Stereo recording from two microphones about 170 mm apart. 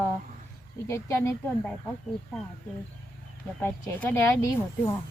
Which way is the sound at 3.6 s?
15° left (ahead or behind).